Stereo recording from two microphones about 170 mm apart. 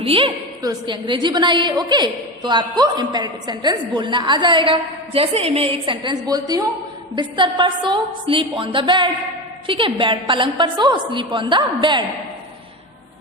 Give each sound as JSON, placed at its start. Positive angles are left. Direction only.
{"t": 0.0, "sound": "a woman's voice", "side_deg": -35}